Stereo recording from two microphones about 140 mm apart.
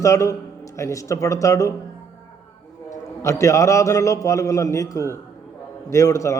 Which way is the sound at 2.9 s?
20° left (ahead or behind).